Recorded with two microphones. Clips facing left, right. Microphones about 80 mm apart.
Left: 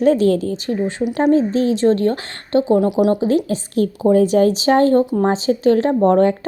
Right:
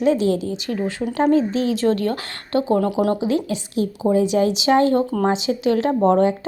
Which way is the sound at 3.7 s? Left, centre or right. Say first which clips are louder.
Left 4 dB; left.